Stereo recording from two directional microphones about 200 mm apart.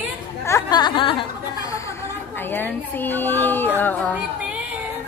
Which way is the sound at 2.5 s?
10° left (ahead or behind).